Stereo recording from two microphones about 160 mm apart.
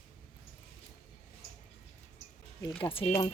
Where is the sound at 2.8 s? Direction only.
35° left (ahead or behind).